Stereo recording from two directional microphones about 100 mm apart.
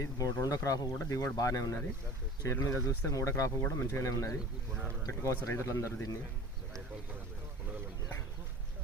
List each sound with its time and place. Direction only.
0.0 s speech: 35° left (ahead or behind)